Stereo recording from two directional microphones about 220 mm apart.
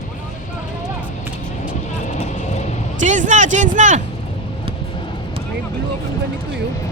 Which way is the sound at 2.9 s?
35° right (ahead or behind).